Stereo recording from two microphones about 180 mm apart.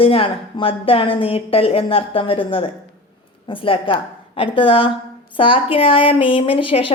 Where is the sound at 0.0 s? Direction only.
30° left (ahead or behind).